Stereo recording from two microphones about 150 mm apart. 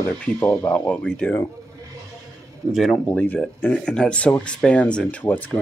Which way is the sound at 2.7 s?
Centre (ahead or behind).